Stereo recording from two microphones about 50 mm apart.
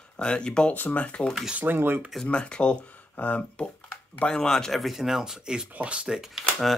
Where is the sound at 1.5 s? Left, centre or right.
Right.